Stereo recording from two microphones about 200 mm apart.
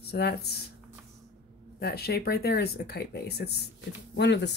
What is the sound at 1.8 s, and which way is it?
Speech, 50° left (ahead or behind).